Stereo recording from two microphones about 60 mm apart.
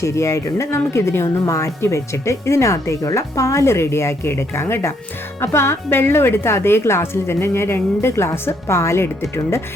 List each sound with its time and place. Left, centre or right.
0.0 s a woman's voice: left